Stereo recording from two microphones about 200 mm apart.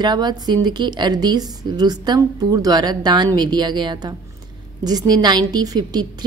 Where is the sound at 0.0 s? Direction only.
20° right (ahead or behind).